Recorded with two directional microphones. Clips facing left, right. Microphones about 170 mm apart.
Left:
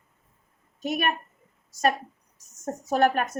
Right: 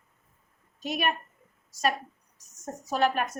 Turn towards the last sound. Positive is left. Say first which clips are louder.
# left 4 dB
turn(degrees=50)  # may be behind; listen again after turning